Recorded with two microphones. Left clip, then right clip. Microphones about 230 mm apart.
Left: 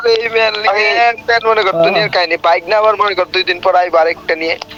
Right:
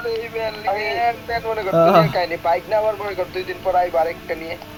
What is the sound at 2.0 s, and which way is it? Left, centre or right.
Speech, left.